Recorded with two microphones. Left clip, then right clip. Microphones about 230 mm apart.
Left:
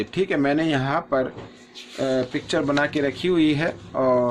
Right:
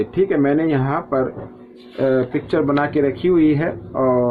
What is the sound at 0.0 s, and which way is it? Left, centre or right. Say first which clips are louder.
Speech: right 5 dB; left.